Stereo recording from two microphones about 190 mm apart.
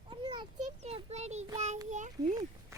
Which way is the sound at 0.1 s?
25° right (ahead or behind).